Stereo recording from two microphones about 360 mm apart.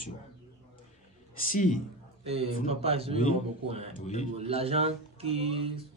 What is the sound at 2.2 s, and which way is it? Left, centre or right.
Speech, centre.